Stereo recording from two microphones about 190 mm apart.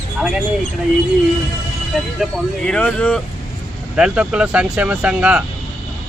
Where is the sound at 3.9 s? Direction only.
5° right (ahead or behind).